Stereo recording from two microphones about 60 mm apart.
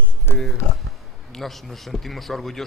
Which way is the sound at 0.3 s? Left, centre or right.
Left.